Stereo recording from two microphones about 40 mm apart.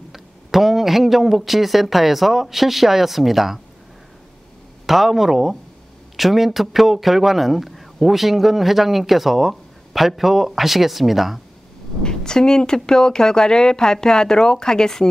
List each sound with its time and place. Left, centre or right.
0.1 s speech: centre
4.8 s speech: centre
12.0 s speech: centre